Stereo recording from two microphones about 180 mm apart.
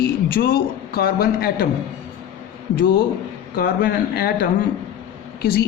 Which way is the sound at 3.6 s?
55° left (ahead or behind).